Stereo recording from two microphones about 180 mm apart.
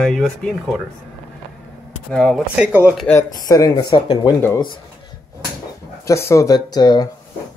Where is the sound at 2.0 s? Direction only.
5° left (ahead or behind).